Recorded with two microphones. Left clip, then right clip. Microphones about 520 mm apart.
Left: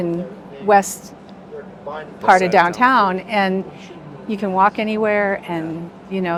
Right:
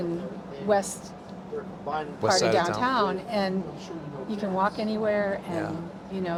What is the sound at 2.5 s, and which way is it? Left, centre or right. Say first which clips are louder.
Speech: left 11 dB; left.